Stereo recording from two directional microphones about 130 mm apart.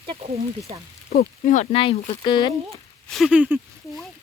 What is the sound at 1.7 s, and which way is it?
Speech, 40° left (ahead or behind).